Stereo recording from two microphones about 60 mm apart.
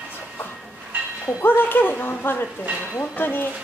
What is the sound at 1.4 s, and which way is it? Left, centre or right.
Speech, left.